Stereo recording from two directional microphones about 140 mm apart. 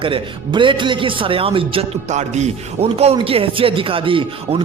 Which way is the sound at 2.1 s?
55° right (ahead or behind).